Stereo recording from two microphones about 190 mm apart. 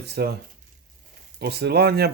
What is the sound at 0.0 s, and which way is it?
Speech, 60° right (ahead or behind).